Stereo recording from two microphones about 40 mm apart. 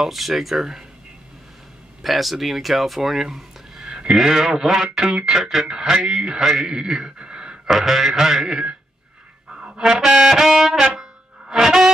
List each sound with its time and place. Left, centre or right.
0.0 s speech: centre
2.0 s speech: centre
3.9 s speech: right
5.7 s speech: centre
7.6 s speech: centre
9.6 s music: centre
10.4 s speech: centre
11.0 s music: centre